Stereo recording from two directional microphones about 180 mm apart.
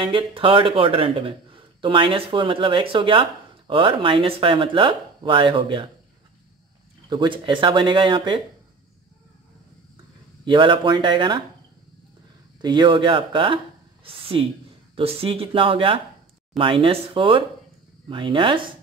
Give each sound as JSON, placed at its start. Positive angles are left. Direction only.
{"t": 0.0, "sound": "a man's voice", "side_deg": -30}
{"t": 7.1, "sound": "a man's voice", "side_deg": -25}
{"t": 10.4, "sound": "a man's voice", "side_deg": -25}
{"t": 12.6, "sound": "a man's voice", "side_deg": -25}